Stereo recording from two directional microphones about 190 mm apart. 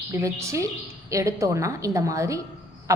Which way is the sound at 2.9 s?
15° right (ahead or behind).